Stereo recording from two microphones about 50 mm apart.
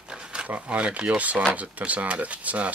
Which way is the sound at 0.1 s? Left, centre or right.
Centre.